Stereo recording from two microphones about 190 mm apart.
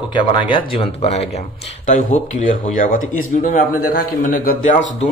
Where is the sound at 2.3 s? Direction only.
40° left (ahead or behind).